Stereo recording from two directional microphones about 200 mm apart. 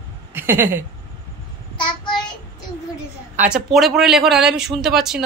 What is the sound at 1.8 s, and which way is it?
Child singing, 20° left (ahead or behind).